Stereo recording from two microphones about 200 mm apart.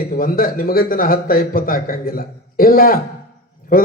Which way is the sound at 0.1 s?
45° left (ahead or behind).